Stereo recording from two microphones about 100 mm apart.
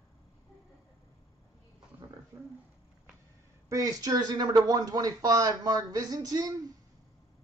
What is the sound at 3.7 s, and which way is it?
Speech, 40° right (ahead or behind).